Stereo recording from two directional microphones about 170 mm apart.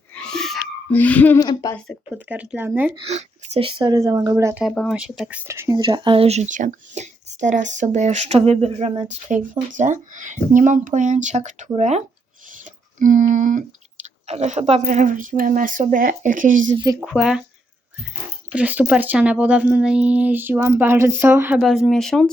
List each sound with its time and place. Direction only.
0.1 s a sound: 5° left (ahead or behind)
1.4 s speech: 25° left (ahead or behind)
2.1 s speech: 10° right (ahead or behind)
2.9 s a woman's voice: 40° right (ahead or behind); by 4.6 s 15° right (ahead or behind)
4.6 s speech: centre (ahead or behind); by 16.6 s 50° right (ahead or behind)
16.7 s a woman's voice: 25° right (ahead or behind)
17.0 s speech: 5° right (ahead or behind)
18.5 s speech: 10° right (ahead or behind)
21.6 s speech: centre (ahead or behind)